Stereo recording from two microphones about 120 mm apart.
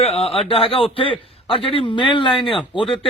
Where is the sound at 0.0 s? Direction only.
55° left (ahead or behind).